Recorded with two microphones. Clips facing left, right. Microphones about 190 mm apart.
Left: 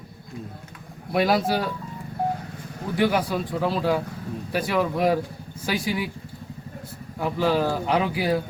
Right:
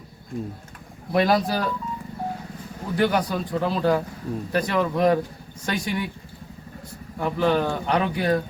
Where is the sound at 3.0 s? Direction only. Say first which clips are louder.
Even; centre (ahead or behind).